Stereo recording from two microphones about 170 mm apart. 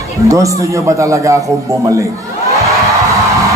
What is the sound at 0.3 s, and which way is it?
A man's voice, 20° right (ahead or behind).